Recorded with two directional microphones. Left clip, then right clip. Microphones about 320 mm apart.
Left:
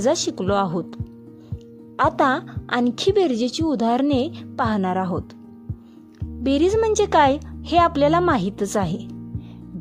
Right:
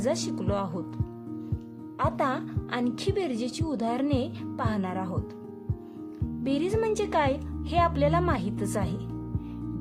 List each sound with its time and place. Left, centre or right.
0.0 s a woman's voice: left
2.0 s a woman's voice: left
6.4 s a woman's voice: left